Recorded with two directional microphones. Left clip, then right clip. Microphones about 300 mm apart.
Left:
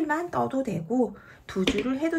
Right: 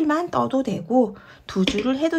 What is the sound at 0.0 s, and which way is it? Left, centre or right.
Speech, centre.